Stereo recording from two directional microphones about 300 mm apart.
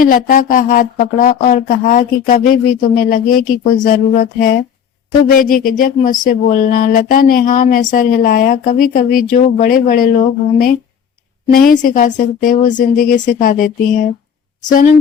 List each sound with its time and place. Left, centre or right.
0.0 s speech: left